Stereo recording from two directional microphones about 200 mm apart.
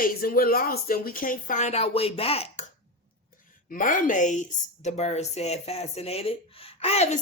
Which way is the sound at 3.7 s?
40° left (ahead or behind).